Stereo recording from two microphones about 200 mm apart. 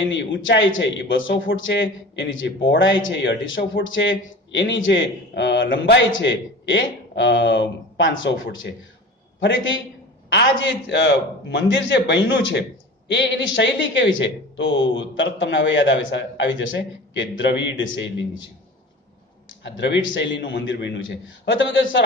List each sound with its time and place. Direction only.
0.0 s a man's voice: 65° left (ahead or behind)
10.8 s speech: 60° left (ahead or behind)
19.6 s a man's voice: 65° left (ahead or behind)